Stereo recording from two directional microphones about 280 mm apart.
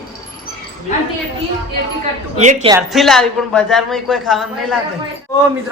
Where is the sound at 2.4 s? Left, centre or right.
Right.